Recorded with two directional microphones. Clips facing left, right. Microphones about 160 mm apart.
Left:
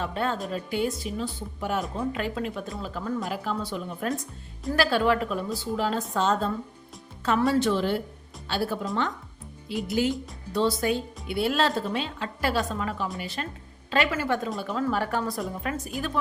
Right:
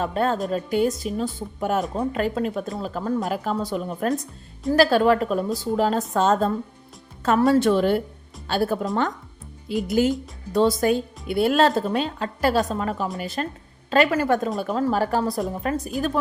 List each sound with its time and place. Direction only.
0.0 s a woman's voice: 40° right (ahead or behind)
14.8 s a woman's voice: 35° right (ahead or behind)